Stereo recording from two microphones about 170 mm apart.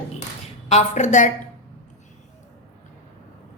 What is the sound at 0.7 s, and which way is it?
Speech, 45° left (ahead or behind).